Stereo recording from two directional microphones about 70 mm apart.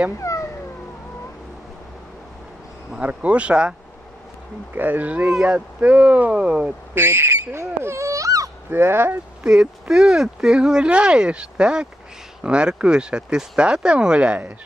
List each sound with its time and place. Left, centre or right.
0.2 s cat: left
3.0 s speech: centre
4.7 s speech: right
6.9 s speech: right
8.7 s speech: right
9.4 s speech: centre